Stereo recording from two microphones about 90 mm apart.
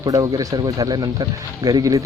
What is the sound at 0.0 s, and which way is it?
Speech, 45° right (ahead or behind).